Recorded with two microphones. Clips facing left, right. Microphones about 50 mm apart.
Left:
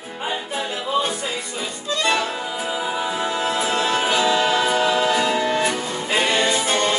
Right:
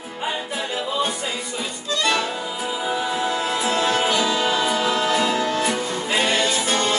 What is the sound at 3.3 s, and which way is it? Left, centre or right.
Music, left.